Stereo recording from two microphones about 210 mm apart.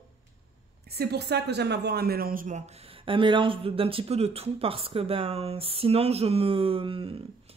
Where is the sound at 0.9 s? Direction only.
50° right (ahead or behind).